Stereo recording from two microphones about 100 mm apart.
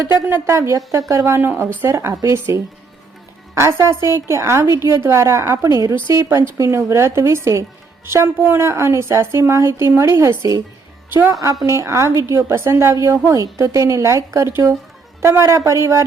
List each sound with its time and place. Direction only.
0.3 s a woman's voice: 25° right (ahead or behind)